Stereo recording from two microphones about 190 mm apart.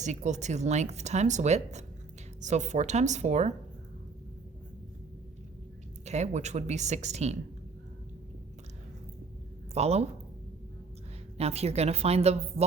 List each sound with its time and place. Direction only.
0.0 s speech: 40° right (ahead or behind)
6.1 s speech: 35° right (ahead or behind)
9.7 s speech: 35° right (ahead or behind)
11.3 s speech: 35° right (ahead or behind)